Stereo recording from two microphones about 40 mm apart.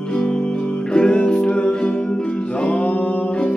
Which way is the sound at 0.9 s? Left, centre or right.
Left.